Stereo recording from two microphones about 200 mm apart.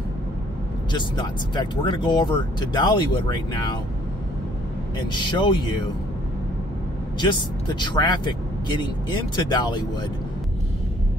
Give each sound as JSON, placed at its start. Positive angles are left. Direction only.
{"t": 0.9, "sound": "speech", "side_deg": 20}
{"t": 5.1, "sound": "speech", "side_deg": 25}
{"t": 7.2, "sound": "speech", "side_deg": 20}
{"t": 9.5, "sound": "speech", "side_deg": 20}